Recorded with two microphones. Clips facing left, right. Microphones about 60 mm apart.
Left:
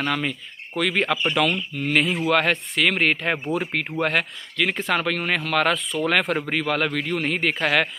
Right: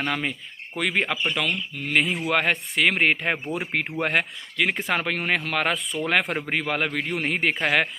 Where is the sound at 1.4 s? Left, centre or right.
Centre.